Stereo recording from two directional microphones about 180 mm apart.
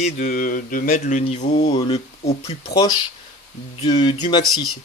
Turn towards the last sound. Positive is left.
turn(degrees=25)  # may be behind; listen again after turning